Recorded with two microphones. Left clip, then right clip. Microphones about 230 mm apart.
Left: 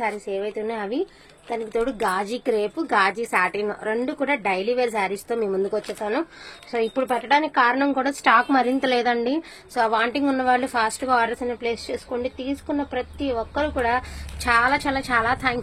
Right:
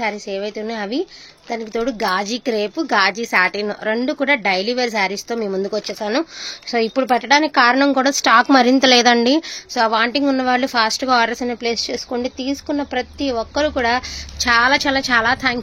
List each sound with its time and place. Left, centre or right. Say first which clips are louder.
0.0 s a woman's voice: right 3 dB; right